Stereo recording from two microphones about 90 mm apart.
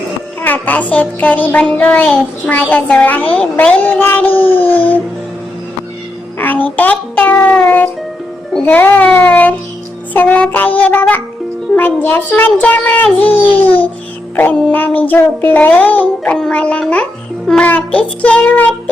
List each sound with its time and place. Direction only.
0.4 s music: 20° left (ahead or behind)
3.5 s a child's voice: 15° left (ahead or behind)
4.5 s a sound: 20° left (ahead or behind)
6.4 s music: 20° left (ahead or behind)
6.7 s a child's voice: 20° left (ahead or behind)
8.6 s music: 20° left (ahead or behind)
10.2 s a child's voice: 15° left (ahead or behind)
10.8 s music: 15° left (ahead or behind)
11.7 s a child's voice: 20° left (ahead or behind)
14.6 s music: 20° left (ahead or behind)